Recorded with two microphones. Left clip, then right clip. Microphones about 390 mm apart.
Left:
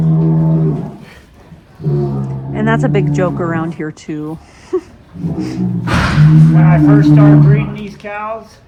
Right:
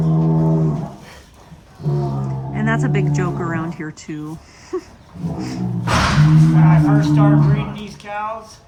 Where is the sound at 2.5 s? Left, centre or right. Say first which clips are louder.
Left 6 dB; centre.